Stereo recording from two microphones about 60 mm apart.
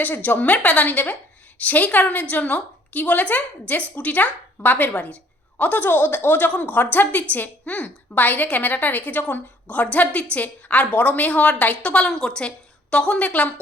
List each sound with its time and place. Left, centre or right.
0.0 s a woman's voice: left